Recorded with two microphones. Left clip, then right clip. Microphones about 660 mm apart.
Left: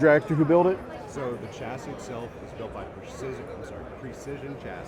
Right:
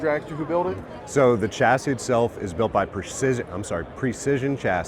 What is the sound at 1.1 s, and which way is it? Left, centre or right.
Speech, right.